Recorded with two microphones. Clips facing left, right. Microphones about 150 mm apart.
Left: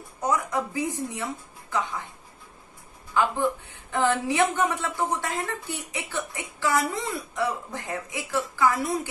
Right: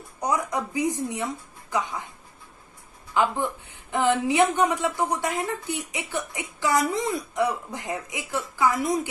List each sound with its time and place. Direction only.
0.2 s a woman's voice: 15° right (ahead or behind)
3.1 s a woman's voice: 20° right (ahead or behind)